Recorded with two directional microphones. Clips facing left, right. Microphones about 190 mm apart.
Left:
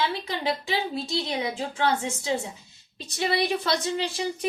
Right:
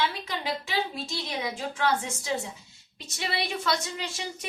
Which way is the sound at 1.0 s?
20° left (ahead or behind).